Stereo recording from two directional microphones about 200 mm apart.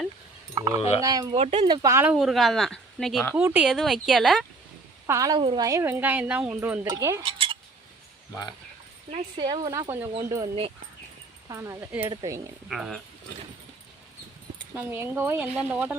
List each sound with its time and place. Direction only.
0.5 s cowbell: 20° right (ahead or behind)
1.0 s speech: 20° right (ahead or behind)
1.4 s speech: 30° right (ahead or behind); by 2.1 s 10° right (ahead or behind)
2.1 s speech: centre (ahead or behind)
5.0 s speech: 15° right (ahead or behind)
7.3 s cutlery: 25° right (ahead or behind)
9.0 s speech: 25° right (ahead or behind)
9.9 s speech: 10° right (ahead or behind)
12.6 s speech: centre (ahead or behind)
14.8 s speech: 10° right (ahead or behind)